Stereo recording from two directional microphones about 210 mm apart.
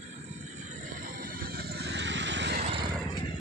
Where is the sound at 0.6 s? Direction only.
40° right (ahead or behind); by 2.6 s 55° right (ahead or behind).